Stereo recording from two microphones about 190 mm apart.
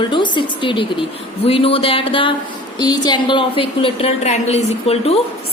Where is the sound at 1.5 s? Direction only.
30° left (ahead or behind).